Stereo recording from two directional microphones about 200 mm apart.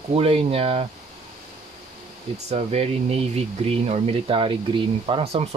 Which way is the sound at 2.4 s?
35° right (ahead or behind).